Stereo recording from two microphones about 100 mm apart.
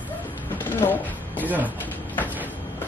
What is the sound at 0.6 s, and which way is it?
Speech, 20° left (ahead or behind).